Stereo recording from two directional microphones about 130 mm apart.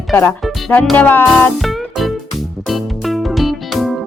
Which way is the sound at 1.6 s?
Centre (ahead or behind).